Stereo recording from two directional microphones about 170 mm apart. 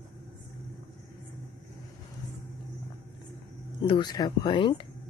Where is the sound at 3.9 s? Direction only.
25° left (ahead or behind).